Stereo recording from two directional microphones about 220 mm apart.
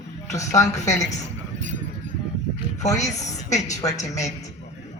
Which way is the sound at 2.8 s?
30° left (ahead or behind).